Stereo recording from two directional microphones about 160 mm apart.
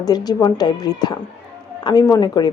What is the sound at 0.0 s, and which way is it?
A woman's voice, 25° left (ahead or behind).